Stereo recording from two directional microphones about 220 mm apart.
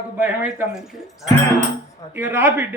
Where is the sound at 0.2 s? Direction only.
5° right (ahead or behind).